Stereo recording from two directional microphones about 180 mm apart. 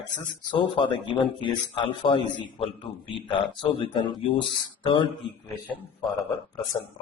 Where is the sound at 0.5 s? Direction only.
25° left (ahead or behind).